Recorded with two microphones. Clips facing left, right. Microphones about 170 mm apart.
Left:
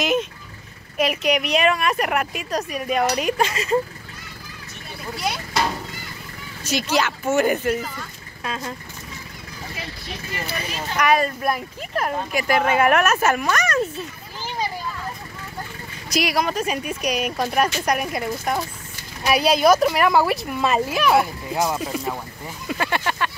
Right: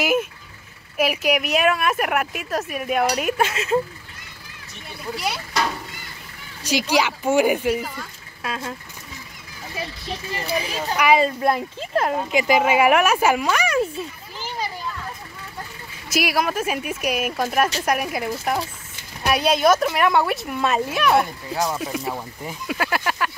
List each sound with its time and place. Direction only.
0.0 s a woman's voice: 10° right (ahead or behind)
5.1 s a woman's voice: 5° right (ahead or behind)
6.6 s speech: 10° right (ahead or behind)
10.5 s speech: 10° right (ahead or behind)
11.1 s speech: 25° right (ahead or behind); by 13.8 s 10° right (ahead or behind)
16.1 s a woman's voice: 5° right (ahead or behind)
22.7 s a sound: 5° right (ahead or behind)